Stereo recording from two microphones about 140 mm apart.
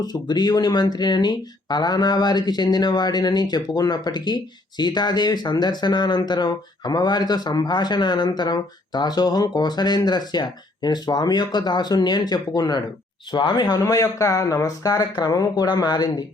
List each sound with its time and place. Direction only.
0.0 s speech: 30° left (ahead or behind)